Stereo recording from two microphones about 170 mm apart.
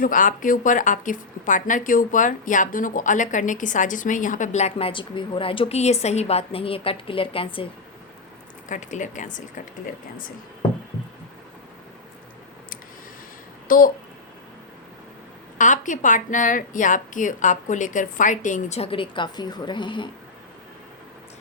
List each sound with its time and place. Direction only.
0.0 s speech: 50° left (ahead or behind); by 7.7 s 30° left (ahead or behind)
8.7 s speech: 45° left (ahead or behind)
13.7 s a child's voice: 55° left (ahead or behind)
15.5 s speech: 50° left (ahead or behind); by 20.1 s 30° left (ahead or behind)